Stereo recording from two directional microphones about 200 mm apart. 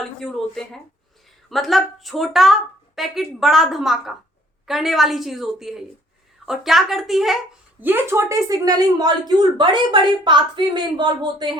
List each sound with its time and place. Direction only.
0.0 s a woman's voice: centre (ahead or behind); by 11.5 s 20° right (ahead or behind)